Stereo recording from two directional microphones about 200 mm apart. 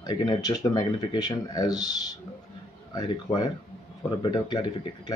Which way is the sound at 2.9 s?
20° left (ahead or behind).